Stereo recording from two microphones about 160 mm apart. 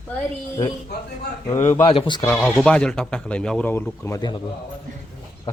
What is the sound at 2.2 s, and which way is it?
Speech, 5° left (ahead or behind).